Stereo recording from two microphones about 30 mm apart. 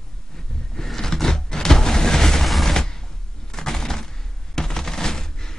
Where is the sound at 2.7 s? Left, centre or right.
Centre.